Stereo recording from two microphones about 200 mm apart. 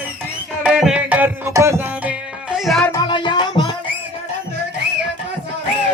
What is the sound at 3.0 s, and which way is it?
Music, 25° left (ahead or behind).